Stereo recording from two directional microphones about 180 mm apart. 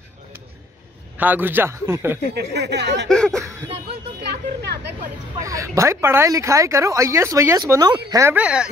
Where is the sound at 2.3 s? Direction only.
70° right (ahead or behind).